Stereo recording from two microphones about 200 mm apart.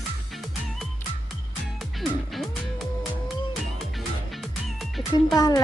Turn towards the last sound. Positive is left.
turn(degrees=20)  # may be behind; listen again after turning